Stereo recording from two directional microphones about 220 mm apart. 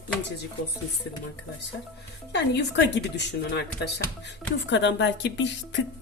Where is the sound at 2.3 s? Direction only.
50° left (ahead or behind).